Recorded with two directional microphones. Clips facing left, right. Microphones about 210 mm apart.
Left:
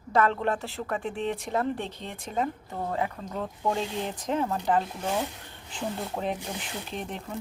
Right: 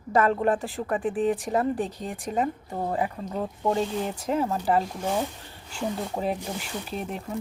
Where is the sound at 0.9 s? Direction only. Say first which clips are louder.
Right 6 dB; centre (ahead or behind).